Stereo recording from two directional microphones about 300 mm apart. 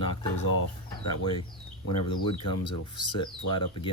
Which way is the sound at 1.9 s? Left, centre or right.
Left.